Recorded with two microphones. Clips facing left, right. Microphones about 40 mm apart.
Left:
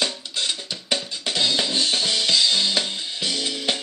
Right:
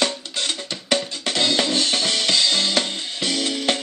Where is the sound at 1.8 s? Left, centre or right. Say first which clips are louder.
Right 1 dB; right.